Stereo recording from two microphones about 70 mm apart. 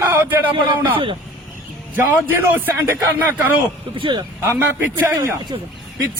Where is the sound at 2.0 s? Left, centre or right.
Right.